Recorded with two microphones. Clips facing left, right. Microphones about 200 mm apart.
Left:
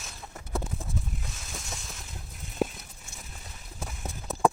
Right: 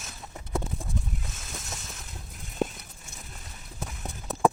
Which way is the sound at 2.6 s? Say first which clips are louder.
Even; 5° left (ahead or behind).